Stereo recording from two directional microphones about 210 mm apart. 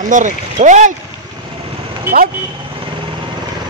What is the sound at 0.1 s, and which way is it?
Speech, 35° right (ahead or behind).